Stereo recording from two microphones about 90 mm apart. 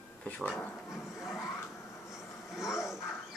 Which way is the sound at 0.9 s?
30° left (ahead or behind).